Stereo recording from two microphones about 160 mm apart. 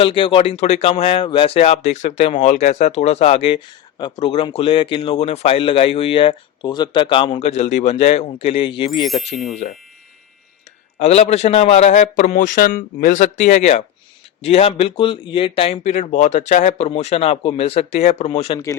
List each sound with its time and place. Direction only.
0.0 s speech: 30° left (ahead or behind)
7.4 s speech: 45° left (ahead or behind)
9.0 s speech: centre (ahead or behind)
11.0 s a man's voice: 45° left (ahead or behind)